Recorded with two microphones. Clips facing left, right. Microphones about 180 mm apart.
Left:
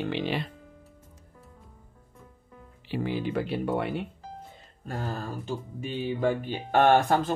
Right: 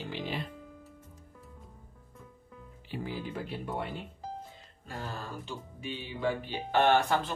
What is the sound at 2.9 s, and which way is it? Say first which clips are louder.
Speech: left 8 dB; 75° left (ahead or behind).